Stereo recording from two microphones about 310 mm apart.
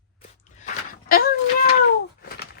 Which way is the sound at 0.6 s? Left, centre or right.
Left.